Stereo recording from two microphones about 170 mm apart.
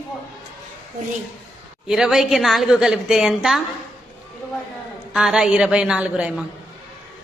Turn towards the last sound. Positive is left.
turn(degrees=-5)  # may be behind; listen again after turning